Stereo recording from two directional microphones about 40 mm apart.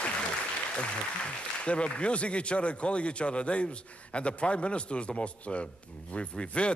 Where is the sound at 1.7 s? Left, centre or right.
Left.